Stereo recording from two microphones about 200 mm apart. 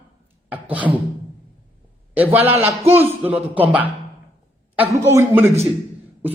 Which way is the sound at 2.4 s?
30° right (ahead or behind).